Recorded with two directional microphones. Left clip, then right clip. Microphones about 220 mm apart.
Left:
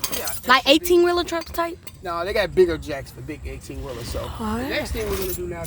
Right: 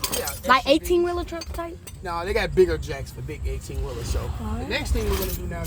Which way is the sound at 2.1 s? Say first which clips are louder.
Left 2 dB; 45° left (ahead or behind).